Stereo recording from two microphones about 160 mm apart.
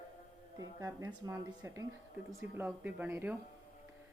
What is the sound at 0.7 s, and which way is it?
Speech, 20° right (ahead or behind).